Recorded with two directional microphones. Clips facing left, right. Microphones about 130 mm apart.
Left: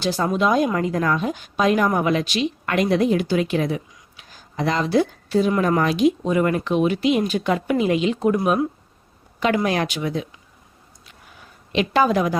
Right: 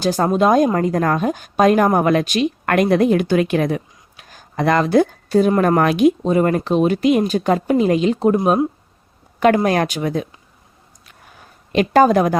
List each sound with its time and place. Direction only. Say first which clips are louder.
0.0 s a woman's voice: right 5 dB; 45° right (ahead or behind)
6.2 s speech: right 4 dB; 35° right (ahead or behind)
9.6 s a woman's voice: right 4 dB; 45° right (ahead or behind)
11.7 s a woman's voice: right 6 dB; 45° right (ahead or behind)